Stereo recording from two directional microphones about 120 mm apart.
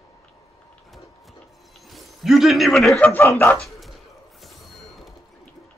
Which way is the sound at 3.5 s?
Centre (ahead or behind).